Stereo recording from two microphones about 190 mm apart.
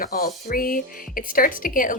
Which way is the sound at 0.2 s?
50° left (ahead or behind).